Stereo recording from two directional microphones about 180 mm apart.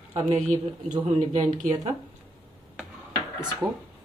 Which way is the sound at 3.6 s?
5° right (ahead or behind).